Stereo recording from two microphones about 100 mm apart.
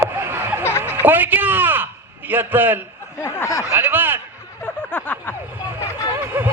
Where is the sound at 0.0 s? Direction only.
25° right (ahead or behind).